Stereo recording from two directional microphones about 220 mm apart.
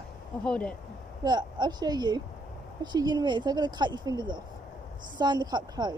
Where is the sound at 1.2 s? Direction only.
20° right (ahead or behind).